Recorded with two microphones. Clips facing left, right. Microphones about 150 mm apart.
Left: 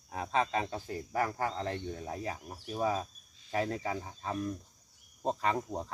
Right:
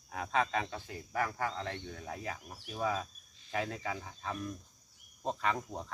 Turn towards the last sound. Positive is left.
turn(degrees=30)  # may be behind; listen again after turning